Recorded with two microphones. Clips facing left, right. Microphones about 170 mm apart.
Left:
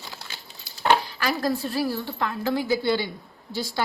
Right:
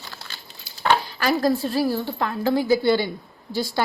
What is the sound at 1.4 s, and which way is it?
A woman's voice, 30° right (ahead or behind).